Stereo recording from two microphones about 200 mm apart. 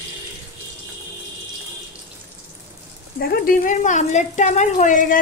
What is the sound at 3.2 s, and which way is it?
A woman's voice, 45° left (ahead or behind).